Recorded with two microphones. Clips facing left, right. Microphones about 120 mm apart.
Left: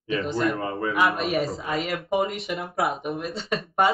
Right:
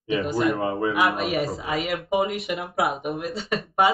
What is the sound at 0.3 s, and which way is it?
Speech, 5° right (ahead or behind).